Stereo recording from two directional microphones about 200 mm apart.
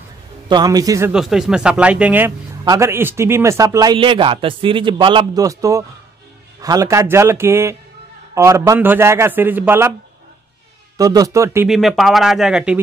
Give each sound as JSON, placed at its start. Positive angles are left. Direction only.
{"t": 0.5, "sound": "a man's voice", "side_deg": -20}
{"t": 1.1, "sound": "a man's voice", "side_deg": 0}
{"t": 11.0, "sound": "a man's voice", "side_deg": -20}
{"t": 11.7, "sound": "speech", "side_deg": 0}